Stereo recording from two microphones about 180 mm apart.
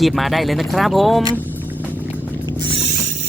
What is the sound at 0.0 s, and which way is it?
Speech, centre (ahead or behind).